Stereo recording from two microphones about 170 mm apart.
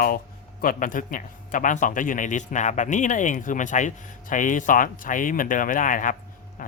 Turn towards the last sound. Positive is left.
turn(degrees=50)  # may be behind; listen again after turning